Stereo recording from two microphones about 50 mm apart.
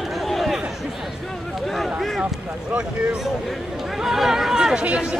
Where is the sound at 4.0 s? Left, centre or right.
Centre.